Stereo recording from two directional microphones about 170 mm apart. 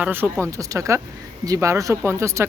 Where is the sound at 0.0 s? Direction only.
10° right (ahead or behind).